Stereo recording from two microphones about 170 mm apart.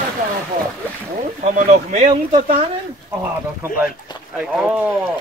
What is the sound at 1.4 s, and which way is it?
Speech, 45° right (ahead or behind).